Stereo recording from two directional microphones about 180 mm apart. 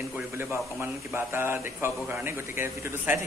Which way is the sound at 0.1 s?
15° right (ahead or behind).